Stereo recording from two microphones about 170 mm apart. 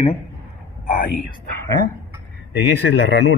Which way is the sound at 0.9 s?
60° left (ahead or behind).